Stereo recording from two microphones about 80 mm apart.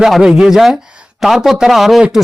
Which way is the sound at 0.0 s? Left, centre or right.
Centre.